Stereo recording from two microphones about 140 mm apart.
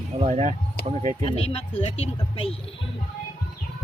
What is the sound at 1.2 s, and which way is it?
Speech, 45° left (ahead or behind).